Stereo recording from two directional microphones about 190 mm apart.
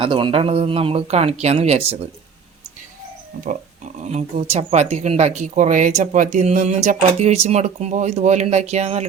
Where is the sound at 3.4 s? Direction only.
40° right (ahead or behind).